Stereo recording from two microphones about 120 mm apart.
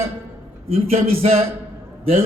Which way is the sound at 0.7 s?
55° right (ahead or behind).